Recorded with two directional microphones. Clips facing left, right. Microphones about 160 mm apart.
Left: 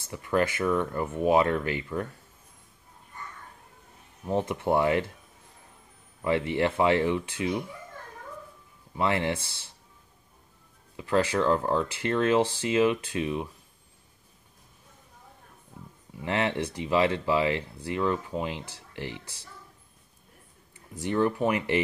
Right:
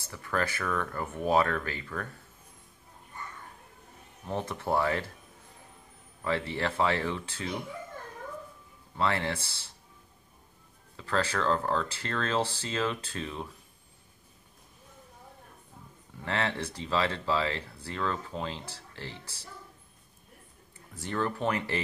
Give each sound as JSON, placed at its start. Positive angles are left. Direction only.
{"t": 0.0, "sound": "speech", "side_deg": 20}
{"t": 4.3, "sound": "speech", "side_deg": 20}
{"t": 6.2, "sound": "speech", "side_deg": 20}
{"t": 8.9, "sound": "speech", "side_deg": 20}
{"t": 11.0, "sound": "speech", "side_deg": 15}
{"t": 16.3, "sound": "speech", "side_deg": 20}
{"t": 20.9, "sound": "speech", "side_deg": 15}